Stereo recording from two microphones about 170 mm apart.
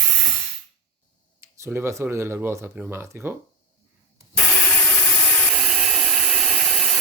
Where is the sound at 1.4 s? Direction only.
15° right (ahead or behind).